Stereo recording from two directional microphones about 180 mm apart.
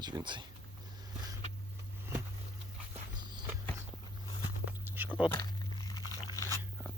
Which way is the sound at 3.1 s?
25° right (ahead or behind).